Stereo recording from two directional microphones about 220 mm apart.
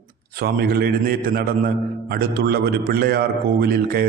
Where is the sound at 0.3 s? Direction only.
45° right (ahead or behind).